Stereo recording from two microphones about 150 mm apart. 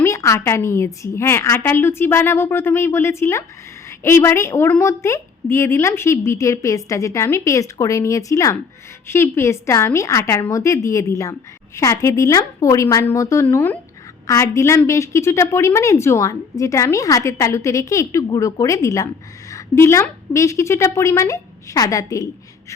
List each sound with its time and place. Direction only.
0.0 s a woman's voice: 20° left (ahead or behind)